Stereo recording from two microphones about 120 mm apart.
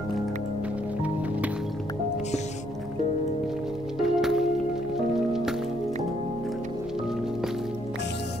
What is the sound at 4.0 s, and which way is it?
Music, 5° right (ahead or behind).